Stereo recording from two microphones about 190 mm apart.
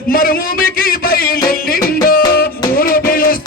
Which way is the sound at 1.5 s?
50° left (ahead or behind).